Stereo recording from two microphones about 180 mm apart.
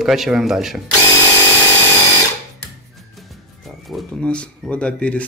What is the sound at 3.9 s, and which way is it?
Speech, 5° left (ahead or behind).